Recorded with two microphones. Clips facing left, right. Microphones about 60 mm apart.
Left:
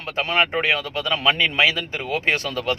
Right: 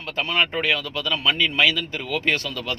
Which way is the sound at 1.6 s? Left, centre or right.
Left.